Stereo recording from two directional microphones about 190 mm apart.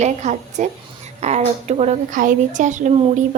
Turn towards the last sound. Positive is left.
turn(degrees=-40)  # may be behind; listen again after turning